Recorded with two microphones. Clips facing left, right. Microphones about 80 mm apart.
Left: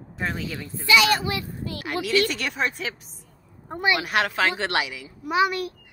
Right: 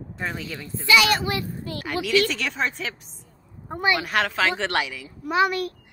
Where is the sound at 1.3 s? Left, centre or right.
Right.